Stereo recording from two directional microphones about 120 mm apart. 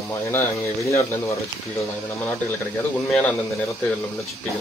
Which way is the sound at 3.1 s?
10° left (ahead or behind).